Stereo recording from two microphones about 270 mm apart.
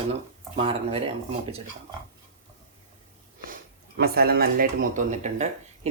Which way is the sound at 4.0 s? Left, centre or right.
Right.